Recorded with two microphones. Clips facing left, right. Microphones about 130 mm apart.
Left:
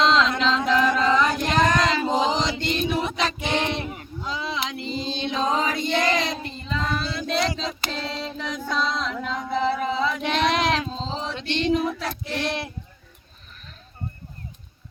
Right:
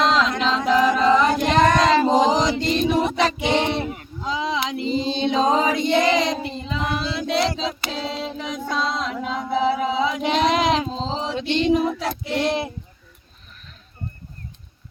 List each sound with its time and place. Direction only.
0.2 s a sound: 10° right (ahead or behind)
2.0 s mantra: 40° right (ahead or behind)
3.1 s child singing: 20° right (ahead or behind)
4.2 s chant: 25° right (ahead or behind)
11.4 s child singing: 15° right (ahead or behind)